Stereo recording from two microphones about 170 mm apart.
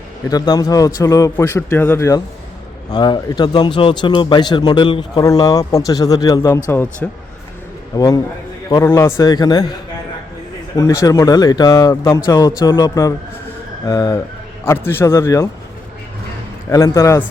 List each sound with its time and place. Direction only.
0.3 s a man's voice: 20° left (ahead or behind)
10.8 s a man's voice: 20° left (ahead or behind)
16.6 s speech: 20° left (ahead or behind)